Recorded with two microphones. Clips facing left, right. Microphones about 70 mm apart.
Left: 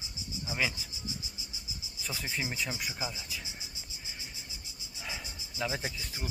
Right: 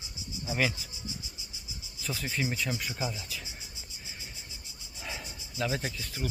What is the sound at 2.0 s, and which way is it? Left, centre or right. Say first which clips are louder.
Speech: right 3 dB; centre.